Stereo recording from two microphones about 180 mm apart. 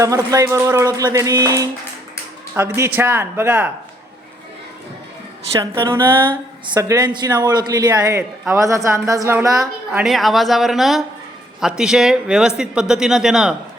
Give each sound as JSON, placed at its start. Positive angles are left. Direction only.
{"t": 0.0, "sound": "a woman's voice", "side_deg": -20}
{"t": 5.5, "sound": "a woman's voice", "side_deg": -15}
{"t": 6.2, "sound": "a woman's voice", "side_deg": -25}
{"t": 10.0, "sound": "speech", "side_deg": 0}